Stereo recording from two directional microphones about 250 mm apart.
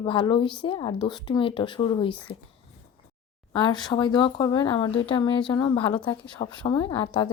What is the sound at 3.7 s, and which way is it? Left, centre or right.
Speech, centre.